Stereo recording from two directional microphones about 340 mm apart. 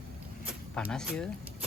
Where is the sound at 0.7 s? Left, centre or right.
Centre.